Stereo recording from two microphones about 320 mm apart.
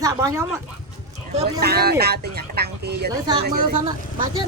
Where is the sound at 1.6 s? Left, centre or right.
Right.